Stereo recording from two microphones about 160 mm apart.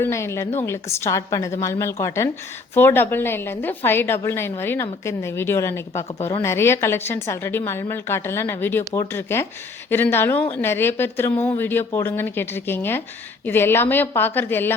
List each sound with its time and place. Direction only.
0.0 s a woman's voice: 15° left (ahead or behind)